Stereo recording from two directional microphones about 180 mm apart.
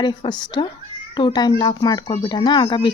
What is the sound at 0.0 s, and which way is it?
Speech, 25° left (ahead or behind).